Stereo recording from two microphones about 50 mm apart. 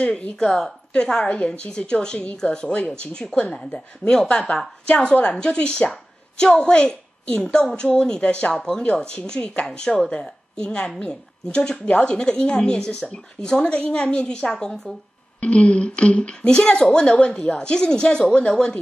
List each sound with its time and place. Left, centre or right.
0.0 s speech: left
0.4 s speech: centre
4.8 s a woman's voice: left
7.4 s speech: centre
7.7 s speech: centre
15.4 s speech: left